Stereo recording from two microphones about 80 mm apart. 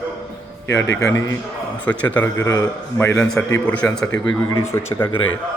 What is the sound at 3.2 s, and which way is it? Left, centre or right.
Speech, centre.